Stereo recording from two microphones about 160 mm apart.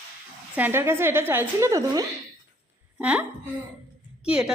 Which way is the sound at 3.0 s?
10° right (ahead or behind).